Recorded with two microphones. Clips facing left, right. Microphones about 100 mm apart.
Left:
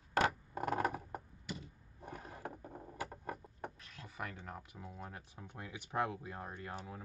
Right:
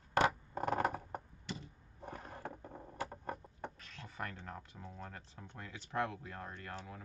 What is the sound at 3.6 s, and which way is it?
Speech, 10° left (ahead or behind).